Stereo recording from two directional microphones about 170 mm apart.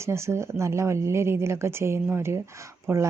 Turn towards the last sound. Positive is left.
turn(degrees=-15)  # may be behind; listen again after turning